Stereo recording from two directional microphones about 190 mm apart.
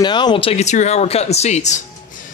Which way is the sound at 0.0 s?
25° left (ahead or behind).